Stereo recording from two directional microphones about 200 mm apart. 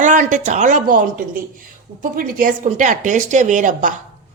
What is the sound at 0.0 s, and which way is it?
A woman's voice, 40° right (ahead or behind).